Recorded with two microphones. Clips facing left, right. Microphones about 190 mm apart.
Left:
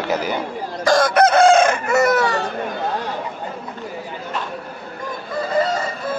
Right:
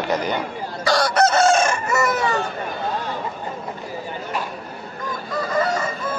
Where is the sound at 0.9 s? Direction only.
50° left (ahead or behind); by 2.3 s 70° left (ahead or behind).